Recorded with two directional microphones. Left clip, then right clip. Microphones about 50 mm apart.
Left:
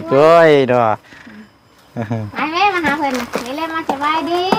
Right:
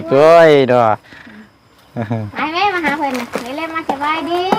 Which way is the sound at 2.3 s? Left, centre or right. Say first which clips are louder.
Left 1 dB; left.